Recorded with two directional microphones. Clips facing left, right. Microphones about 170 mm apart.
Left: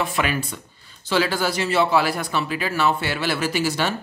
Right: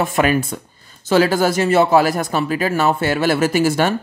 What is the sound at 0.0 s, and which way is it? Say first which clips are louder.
Speech: right 7 dB; 45° right (ahead or behind).